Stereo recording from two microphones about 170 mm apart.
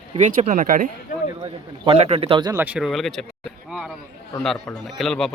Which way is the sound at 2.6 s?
5° right (ahead or behind).